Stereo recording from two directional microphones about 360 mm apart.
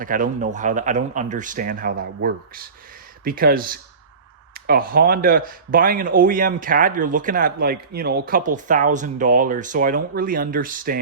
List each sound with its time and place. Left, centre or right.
0.0 s speech: right